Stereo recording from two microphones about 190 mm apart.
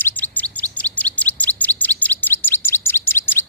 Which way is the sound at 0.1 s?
10° left (ahead or behind).